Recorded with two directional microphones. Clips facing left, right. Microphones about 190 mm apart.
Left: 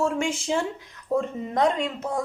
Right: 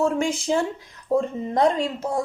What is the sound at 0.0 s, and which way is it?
Speech, 35° right (ahead or behind).